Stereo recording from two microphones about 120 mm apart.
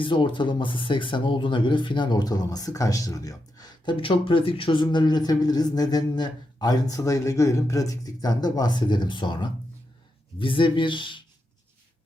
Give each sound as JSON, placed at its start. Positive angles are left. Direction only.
{"t": 0.0, "sound": "speech", "side_deg": 45}